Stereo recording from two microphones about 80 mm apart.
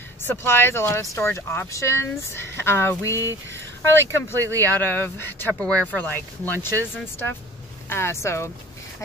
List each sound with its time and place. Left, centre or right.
0.2 s speech: left
4.4 s speech: right
4.6 s speech: left
5.6 s speech: centre; by 8.5 s left